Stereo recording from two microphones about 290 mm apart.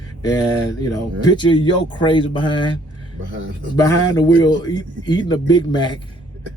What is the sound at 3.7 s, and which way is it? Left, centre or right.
A man's voice, centre.